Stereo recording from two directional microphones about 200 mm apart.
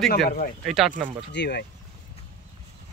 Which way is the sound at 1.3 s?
60° left (ahead or behind).